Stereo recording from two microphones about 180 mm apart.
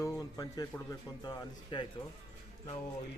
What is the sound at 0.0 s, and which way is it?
Speech, 20° left (ahead or behind).